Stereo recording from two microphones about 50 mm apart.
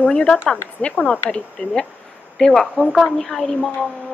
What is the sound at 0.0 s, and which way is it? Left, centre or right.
Speech, left.